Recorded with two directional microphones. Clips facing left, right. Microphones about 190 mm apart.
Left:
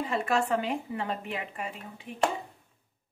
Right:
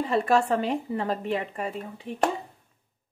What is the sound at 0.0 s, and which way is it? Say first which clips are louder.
Speech: right 5 dB; 35° right (ahead or behind).